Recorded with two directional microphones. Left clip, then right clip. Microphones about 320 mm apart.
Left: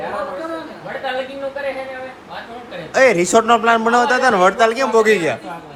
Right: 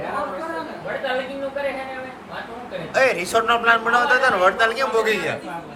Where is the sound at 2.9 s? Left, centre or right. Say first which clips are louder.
Left 6 dB; left.